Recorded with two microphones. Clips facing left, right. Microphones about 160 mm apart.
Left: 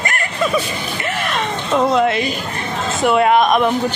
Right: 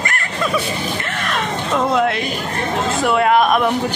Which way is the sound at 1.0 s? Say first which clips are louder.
Left 2 dB; 5° left (ahead or behind).